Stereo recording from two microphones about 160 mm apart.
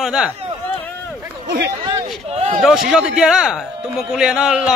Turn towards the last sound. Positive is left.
turn(degrees=-5)  # may be behind; listen again after turning